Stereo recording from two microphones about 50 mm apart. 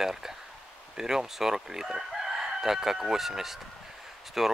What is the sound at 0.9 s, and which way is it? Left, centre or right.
Chicken, centre.